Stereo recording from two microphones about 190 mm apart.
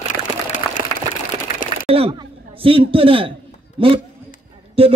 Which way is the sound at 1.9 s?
30° right (ahead or behind).